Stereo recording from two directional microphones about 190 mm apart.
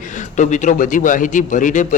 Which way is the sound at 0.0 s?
40° left (ahead or behind).